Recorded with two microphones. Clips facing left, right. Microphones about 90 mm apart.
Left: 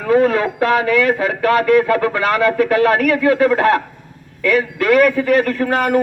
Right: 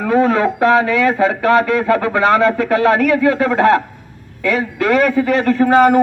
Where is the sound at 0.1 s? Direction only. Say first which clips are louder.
Even; 30° right (ahead or behind).